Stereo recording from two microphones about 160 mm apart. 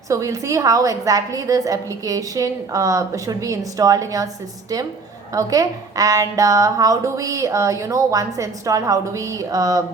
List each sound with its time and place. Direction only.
0.1 s a woman's voice: 20° right (ahead or behind)
5.3 s a woman's voice: 20° right (ahead or behind)